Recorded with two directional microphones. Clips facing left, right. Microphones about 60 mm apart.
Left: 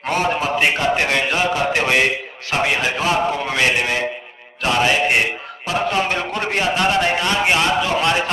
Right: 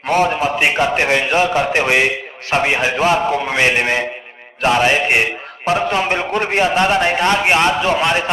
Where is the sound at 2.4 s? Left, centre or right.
Right.